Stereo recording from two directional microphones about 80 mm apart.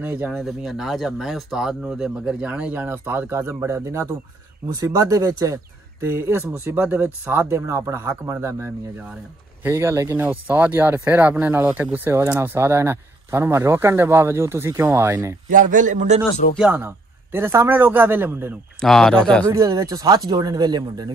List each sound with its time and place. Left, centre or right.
0.0 s speech: right
0.3 s speech: centre
2.4 s a man's voice: centre; by 10.1 s right
10.1 s a man's voice: right
16.7 s speech: right
18.8 s speech: centre
19.5 s speech: right